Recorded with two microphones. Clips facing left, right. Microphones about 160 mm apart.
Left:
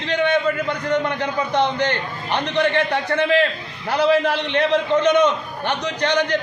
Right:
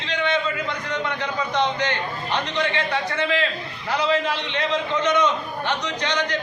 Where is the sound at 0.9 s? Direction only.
55° left (ahead or behind).